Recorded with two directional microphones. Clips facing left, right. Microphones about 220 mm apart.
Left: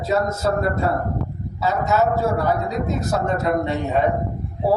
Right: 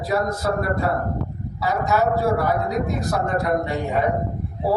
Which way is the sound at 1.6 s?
20° left (ahead or behind).